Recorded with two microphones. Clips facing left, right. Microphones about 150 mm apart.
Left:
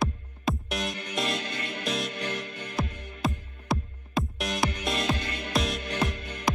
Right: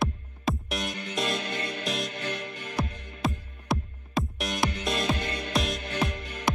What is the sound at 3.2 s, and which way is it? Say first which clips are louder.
Music: even; centre (ahead or behind).